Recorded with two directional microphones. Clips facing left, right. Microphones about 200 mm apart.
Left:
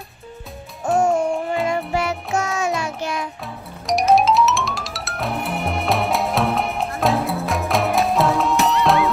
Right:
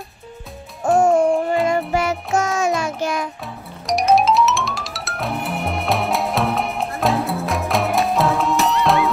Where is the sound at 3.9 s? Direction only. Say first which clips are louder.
Even; centre (ahead or behind).